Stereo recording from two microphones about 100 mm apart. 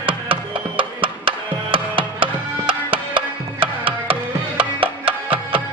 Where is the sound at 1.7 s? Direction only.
60° right (ahead or behind).